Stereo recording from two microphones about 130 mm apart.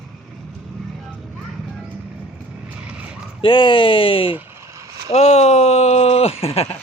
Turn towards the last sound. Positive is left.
turn(degrees=50)  # may be behind; listen again after turning